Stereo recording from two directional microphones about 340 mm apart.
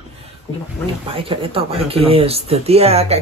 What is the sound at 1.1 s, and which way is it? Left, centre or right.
Speech, centre.